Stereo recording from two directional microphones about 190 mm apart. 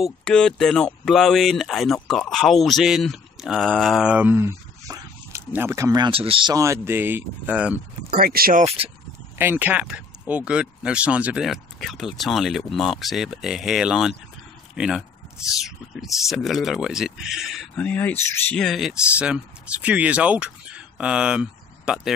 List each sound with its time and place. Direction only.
0.0 s speech: 5° left (ahead or behind)
8.1 s speech: 50° right (ahead or behind)
8.6 s speech: 30° right (ahead or behind)
9.4 s speech: 10° right (ahead or behind)